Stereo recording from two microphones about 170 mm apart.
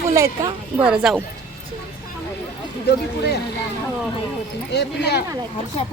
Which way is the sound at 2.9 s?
75° left (ahead or behind).